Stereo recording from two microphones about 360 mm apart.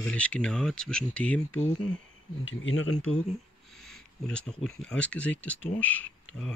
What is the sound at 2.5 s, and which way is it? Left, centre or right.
Speech, left.